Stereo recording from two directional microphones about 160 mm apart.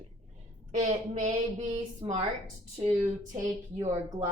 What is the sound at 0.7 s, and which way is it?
Speech, 55° right (ahead or behind).